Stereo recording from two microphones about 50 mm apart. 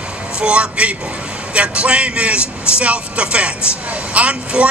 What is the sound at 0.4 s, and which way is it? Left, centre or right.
Speech, right.